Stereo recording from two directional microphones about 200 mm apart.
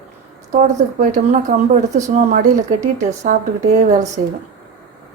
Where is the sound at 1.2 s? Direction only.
35° right (ahead or behind).